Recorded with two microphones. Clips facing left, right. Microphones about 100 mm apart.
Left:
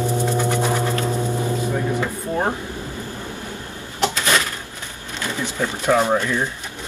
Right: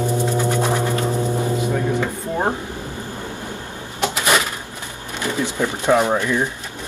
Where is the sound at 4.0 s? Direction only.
15° right (ahead or behind).